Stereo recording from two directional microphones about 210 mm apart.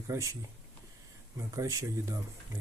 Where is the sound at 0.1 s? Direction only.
15° right (ahead or behind).